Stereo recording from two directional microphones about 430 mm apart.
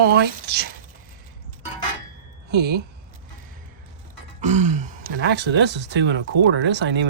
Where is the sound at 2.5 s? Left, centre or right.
Right.